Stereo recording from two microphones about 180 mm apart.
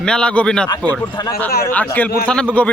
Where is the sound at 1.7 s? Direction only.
10° left (ahead or behind).